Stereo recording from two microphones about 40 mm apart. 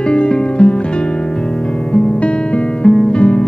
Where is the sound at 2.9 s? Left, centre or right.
Left.